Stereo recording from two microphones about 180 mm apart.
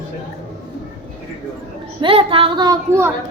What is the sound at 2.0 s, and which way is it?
A woman's voice, 30° right (ahead or behind).